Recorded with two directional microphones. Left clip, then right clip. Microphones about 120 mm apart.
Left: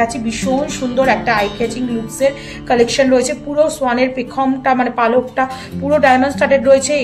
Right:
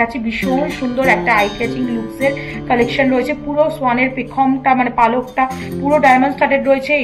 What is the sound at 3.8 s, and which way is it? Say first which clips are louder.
A woman's voice: even; 90° left.